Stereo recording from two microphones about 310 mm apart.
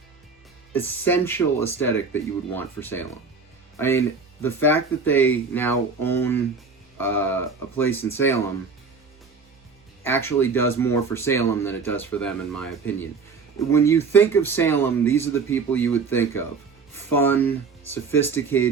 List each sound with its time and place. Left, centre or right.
0.7 s speech: centre
10.0 s speech: centre
13.7 s speech: centre